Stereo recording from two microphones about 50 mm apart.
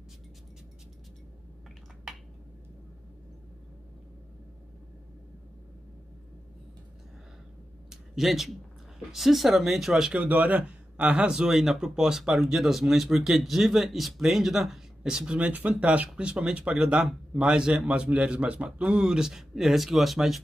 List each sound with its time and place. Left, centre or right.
7.9 s a sound: centre
9.1 s speech: centre
10.2 s speech: right
15.4 s speech: right; by 20.4 s centre